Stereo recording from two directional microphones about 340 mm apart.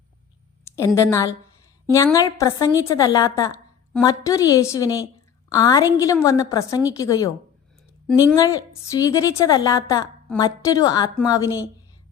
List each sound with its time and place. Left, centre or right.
0.6 s a woman's voice: centre